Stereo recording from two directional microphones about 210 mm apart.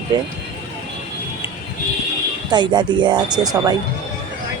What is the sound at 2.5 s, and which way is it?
A woman's voice, 20° right (ahead or behind).